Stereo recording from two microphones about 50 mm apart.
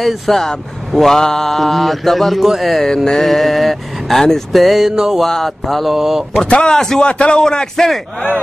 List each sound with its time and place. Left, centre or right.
0.0 s speech: centre
5.2 s speech: centre
6.4 s a man's voice: centre
7.1 s a man's voice: left; by 8.0 s centre